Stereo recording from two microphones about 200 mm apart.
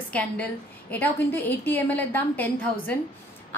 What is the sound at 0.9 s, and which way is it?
A woman's voice, 10° left (ahead or behind).